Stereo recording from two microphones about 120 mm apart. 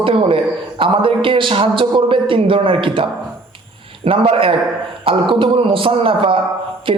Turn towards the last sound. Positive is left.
turn(degrees=-45)  # may be behind; listen again after turning